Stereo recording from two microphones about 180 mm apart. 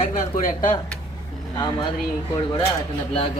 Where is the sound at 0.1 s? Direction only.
45° left (ahead or behind).